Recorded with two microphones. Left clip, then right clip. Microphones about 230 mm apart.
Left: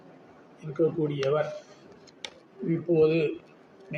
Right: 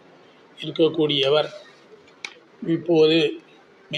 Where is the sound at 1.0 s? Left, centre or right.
Right.